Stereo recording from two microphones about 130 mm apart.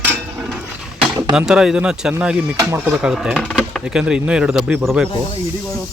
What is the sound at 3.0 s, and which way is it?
Speech, 5° right (ahead or behind).